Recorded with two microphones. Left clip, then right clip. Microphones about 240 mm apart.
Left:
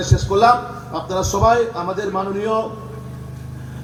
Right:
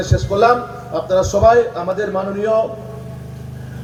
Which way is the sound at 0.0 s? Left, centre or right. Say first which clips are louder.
Even; left.